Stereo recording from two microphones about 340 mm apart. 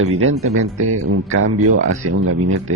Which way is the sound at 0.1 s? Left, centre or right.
Right.